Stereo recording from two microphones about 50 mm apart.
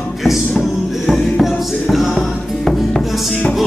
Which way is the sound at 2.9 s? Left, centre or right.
Centre.